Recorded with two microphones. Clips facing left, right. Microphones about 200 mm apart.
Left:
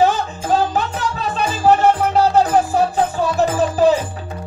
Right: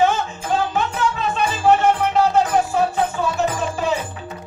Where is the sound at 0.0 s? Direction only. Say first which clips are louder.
Left 2 dB; 35° left (ahead or behind).